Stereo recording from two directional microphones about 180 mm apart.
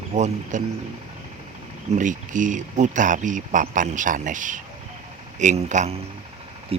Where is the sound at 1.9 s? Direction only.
45° right (ahead or behind).